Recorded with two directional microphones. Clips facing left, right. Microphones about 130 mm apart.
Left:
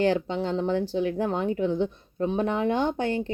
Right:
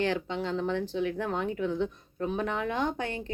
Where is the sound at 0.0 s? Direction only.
35° left (ahead or behind).